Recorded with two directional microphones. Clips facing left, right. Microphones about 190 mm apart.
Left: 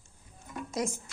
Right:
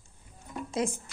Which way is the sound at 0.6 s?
30° right (ahead or behind).